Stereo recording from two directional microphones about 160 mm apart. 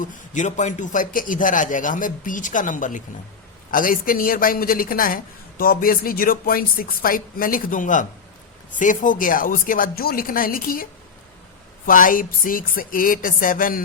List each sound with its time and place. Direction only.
0.0 s a woman's voice: 50° left (ahead or behind)
11.9 s a woman's voice: 60° left (ahead or behind)